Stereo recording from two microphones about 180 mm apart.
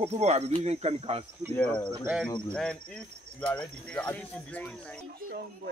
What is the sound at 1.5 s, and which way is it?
Speech, 5° left (ahead or behind).